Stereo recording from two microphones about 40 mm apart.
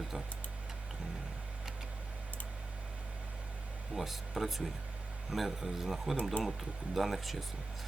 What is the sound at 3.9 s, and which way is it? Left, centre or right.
Speech, centre.